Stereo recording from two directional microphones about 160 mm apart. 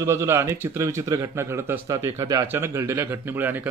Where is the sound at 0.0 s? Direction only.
15° right (ahead or behind).